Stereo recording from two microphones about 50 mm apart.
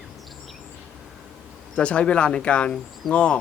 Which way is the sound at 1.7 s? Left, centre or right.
Left.